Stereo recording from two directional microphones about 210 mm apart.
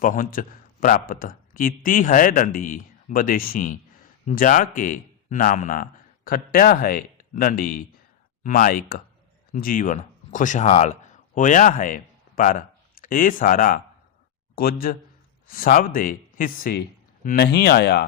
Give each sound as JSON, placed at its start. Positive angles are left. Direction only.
{"t": 0.0, "sound": "a man's voice", "side_deg": 40}